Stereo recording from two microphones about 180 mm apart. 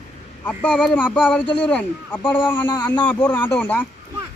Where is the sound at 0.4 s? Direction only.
5° left (ahead or behind).